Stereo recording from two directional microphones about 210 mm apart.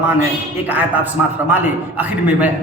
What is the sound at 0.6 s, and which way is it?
A man's voice, 10° right (ahead or behind).